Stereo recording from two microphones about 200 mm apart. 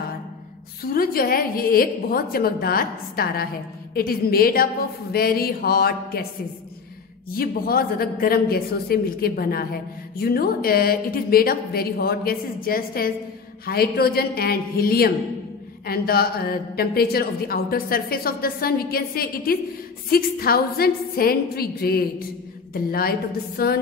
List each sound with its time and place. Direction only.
0.9 s a man's voice: 45° left (ahead or behind)
7.3 s a man's voice: 50° left (ahead or behind)